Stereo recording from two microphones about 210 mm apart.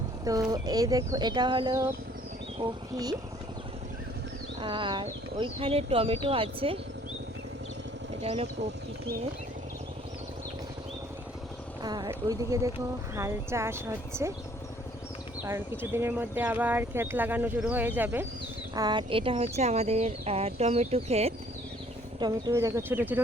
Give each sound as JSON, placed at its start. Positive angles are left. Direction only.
{"t": 0.5, "sound": "speech", "side_deg": -15}
{"t": 4.6, "sound": "speech", "side_deg": -25}
{"t": 8.2, "sound": "speech", "side_deg": -30}
{"t": 11.8, "sound": "speech", "side_deg": -20}
{"t": 15.4, "sound": "speech", "side_deg": -10}
{"t": 18.7, "sound": "speech", "side_deg": -20}
{"t": 22.2, "sound": "speech", "side_deg": -15}